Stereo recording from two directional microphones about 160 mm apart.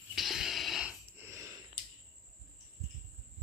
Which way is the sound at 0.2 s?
Centre (ahead or behind).